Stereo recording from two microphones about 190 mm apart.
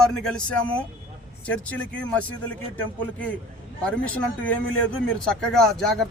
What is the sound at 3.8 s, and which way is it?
A man's voice, 5° left (ahead or behind).